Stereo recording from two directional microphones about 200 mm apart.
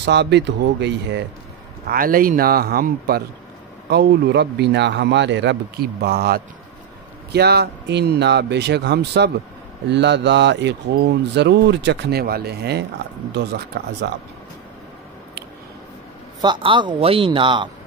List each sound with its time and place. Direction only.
0.0 s speech: 60° right (ahead or behind)
1.9 s speech: 45° right (ahead or behind)
16.3 s speech: 20° right (ahead or behind)